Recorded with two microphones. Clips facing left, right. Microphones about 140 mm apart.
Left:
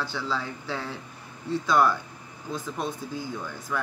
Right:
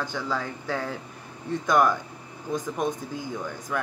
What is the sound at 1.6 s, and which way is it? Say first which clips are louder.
Speech: right 1 dB; 20° right (ahead or behind).